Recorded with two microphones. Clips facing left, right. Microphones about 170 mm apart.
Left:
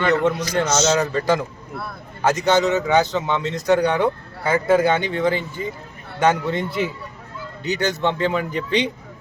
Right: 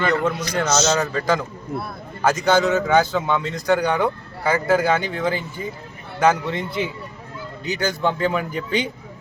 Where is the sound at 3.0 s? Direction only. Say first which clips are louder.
Even; 20° left (ahead or behind).